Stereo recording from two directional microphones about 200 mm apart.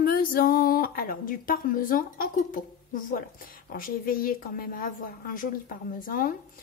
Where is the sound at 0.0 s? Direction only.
45° left (ahead or behind).